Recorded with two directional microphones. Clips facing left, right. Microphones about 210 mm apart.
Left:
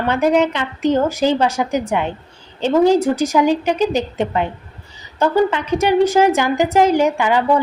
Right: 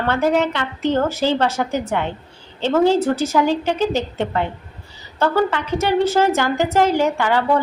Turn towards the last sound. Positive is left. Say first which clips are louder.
# left 2 dB
turn(degrees=15)  # may be behind; listen again after turning